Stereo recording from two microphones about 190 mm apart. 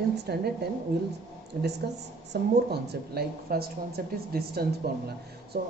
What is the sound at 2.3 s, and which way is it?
Speech, 60° right (ahead or behind).